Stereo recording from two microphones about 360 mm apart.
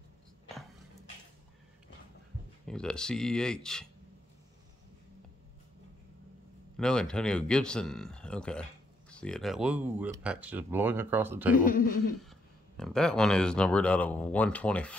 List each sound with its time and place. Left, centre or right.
2.6 s speech: centre
6.8 s speech: centre
11.5 s speech: left
12.2 s speech: centre